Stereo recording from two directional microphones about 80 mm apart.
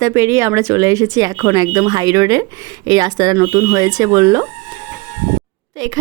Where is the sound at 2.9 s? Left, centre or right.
Right.